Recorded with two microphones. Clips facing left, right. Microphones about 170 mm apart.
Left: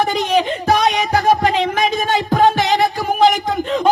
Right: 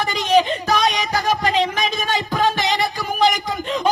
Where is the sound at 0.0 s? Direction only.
55° left (ahead or behind).